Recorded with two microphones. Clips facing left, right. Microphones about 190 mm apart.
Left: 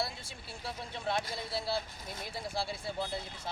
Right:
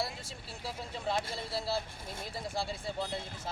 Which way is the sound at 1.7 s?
25° right (ahead or behind).